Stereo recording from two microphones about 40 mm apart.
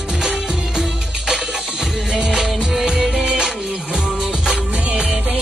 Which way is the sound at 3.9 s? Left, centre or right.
Centre.